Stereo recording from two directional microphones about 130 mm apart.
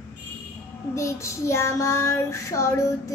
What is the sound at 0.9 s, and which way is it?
Child singing, 20° left (ahead or behind).